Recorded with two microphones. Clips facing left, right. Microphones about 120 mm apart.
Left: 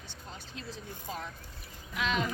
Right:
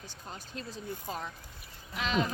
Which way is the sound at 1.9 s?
40° right (ahead or behind).